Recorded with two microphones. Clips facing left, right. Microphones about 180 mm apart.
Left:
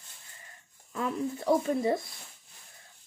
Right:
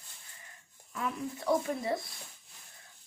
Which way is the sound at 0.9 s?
35° left (ahead or behind).